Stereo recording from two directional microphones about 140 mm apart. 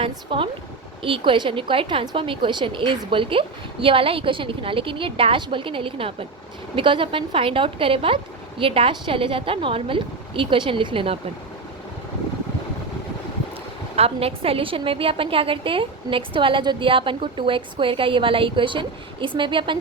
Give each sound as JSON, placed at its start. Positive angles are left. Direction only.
{"t": 0.0, "sound": "a woman's voice", "side_deg": -40}
{"t": 13.9, "sound": "a woman's voice", "side_deg": -45}